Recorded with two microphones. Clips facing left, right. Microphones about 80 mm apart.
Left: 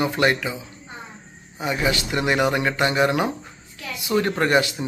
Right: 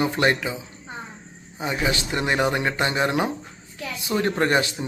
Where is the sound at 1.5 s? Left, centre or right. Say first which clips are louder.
Left 2 dB; right.